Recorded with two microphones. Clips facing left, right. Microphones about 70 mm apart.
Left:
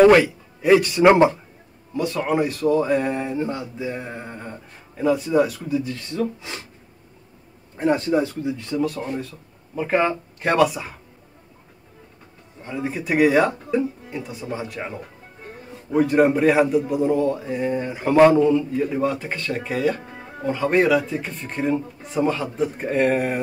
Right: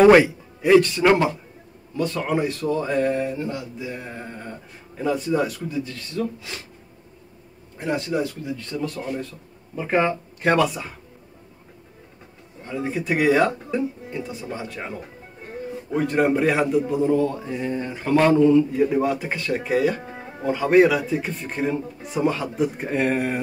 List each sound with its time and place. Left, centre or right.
0.6 s speech: centre
1.0 s speech: left
2.0 s speech: centre
4.9 s speech: centre
5.9 s speech: left
7.7 s speech: left
8.5 s speech: centre
8.8 s speech: centre
12.6 s speech: centre
18.3 s speech: centre